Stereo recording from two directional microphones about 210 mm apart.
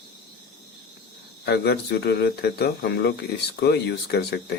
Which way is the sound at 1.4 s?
50° left (ahead or behind).